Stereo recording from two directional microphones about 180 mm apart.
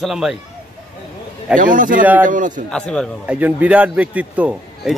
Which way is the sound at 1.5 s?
50° right (ahead or behind).